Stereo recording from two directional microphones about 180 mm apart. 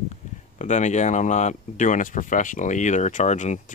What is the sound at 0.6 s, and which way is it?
Speech, 40° left (ahead or behind).